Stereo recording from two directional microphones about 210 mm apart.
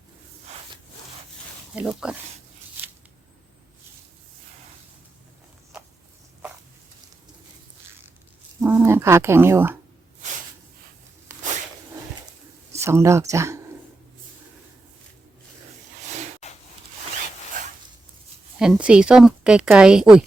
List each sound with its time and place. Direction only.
1.7 s a woman's voice: 5° right (ahead or behind)
8.6 s speech: 10° right (ahead or behind)
12.7 s speech: 15° right (ahead or behind)
16.4 s a sound: 30° left (ahead or behind)
18.6 s a woman's voice: 5° right (ahead or behind)